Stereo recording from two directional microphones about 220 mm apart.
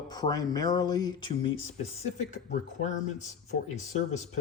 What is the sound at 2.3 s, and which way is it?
Speech, 35° left (ahead or behind).